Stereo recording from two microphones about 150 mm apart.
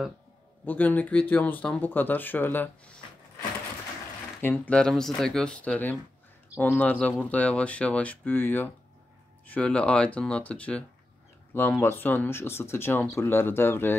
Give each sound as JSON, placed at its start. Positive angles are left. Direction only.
{"t": 0.7, "sound": "speech", "side_deg": 10}
{"t": 4.4, "sound": "speech", "side_deg": 10}
{"t": 11.8, "sound": "speech", "side_deg": 15}